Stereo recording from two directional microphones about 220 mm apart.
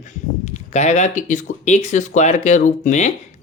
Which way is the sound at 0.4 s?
30° left (ahead or behind).